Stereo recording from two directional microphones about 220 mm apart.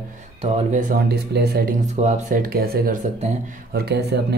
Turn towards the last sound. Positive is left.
turn(degrees=-45)  # may be behind; listen again after turning